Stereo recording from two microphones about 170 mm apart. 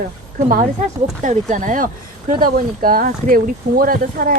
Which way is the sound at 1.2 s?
45° right (ahead or behind).